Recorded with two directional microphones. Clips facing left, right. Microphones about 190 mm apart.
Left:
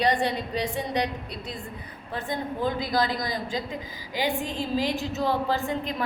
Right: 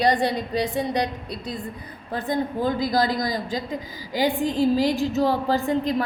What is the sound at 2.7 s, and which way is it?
Speech, 35° right (ahead or behind).